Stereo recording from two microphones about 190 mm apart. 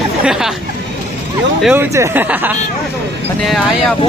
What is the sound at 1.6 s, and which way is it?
Speech, 10° right (ahead or behind).